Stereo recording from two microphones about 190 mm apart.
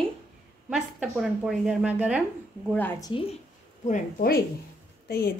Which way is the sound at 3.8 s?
45° left (ahead or behind).